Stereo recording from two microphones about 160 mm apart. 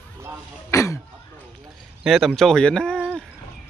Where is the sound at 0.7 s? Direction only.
20° left (ahead or behind).